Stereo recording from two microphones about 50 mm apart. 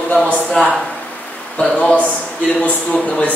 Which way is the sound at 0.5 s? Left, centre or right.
Centre.